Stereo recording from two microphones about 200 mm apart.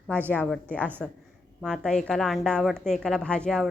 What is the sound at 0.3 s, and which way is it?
A woman's voice, 5° left (ahead or behind).